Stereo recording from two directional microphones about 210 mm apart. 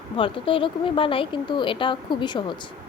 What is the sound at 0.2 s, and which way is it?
Speech, 25° left (ahead or behind).